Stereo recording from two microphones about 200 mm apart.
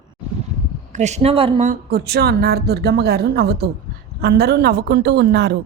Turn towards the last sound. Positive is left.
turn(degrees=-55)  # may be behind; listen again after turning